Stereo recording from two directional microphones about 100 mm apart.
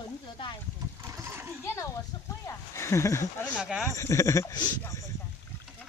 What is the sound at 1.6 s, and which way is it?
Bow-wow, 30° left (ahead or behind).